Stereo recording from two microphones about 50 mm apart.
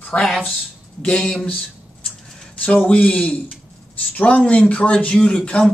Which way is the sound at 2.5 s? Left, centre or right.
Left.